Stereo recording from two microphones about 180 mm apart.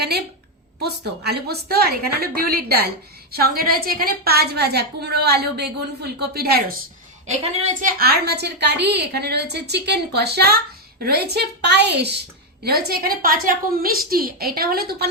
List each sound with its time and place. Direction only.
0.8 s a woman's voice: 65° right (ahead or behind)
7.3 s a woman's voice: 40° right (ahead or behind)
7.9 s a woman's voice: 60° right (ahead or behind)